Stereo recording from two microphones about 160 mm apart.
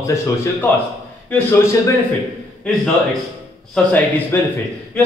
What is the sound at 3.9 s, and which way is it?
Speech, 10° left (ahead or behind).